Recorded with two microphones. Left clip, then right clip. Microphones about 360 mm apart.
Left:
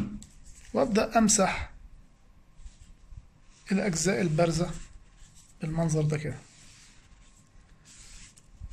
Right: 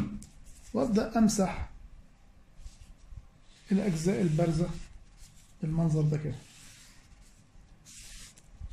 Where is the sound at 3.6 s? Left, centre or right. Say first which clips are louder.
Left 3 dB; left.